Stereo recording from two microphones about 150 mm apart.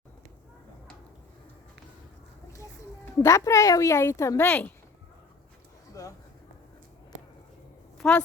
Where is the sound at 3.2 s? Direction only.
20° left (ahead or behind).